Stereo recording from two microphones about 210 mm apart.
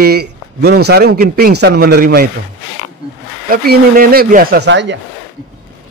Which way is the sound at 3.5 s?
45° right (ahead or behind).